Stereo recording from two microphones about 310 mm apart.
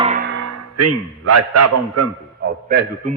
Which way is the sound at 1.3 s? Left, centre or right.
Right.